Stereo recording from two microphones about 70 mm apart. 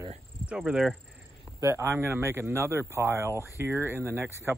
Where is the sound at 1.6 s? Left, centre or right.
Right.